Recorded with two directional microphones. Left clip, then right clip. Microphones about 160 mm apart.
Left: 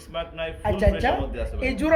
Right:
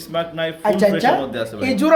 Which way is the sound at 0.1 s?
45° right (ahead or behind).